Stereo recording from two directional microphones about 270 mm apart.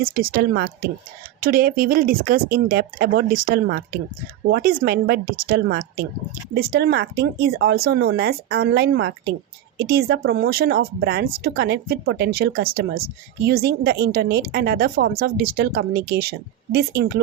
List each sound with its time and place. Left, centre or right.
0.0 s speech: right